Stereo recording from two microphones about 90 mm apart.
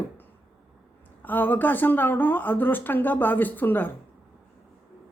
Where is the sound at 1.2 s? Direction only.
20° left (ahead or behind).